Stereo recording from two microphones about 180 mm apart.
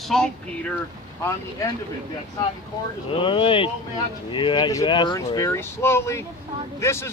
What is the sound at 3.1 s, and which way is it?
Speech, 30° left (ahead or behind).